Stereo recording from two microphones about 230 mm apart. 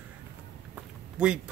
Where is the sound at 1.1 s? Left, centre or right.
Centre.